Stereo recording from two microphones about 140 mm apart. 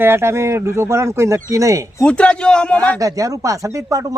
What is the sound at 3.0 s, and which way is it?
Speech, 25° right (ahead or behind).